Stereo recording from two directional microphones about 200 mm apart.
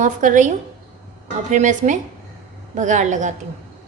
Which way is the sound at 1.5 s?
40° right (ahead or behind).